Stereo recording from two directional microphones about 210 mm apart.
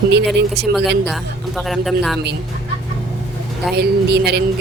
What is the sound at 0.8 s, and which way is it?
Speech, 55° right (ahead or behind).